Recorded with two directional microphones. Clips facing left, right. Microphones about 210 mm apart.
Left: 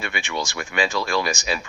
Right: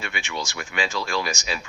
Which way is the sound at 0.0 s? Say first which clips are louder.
Left 3 dB; 55° left (ahead or behind).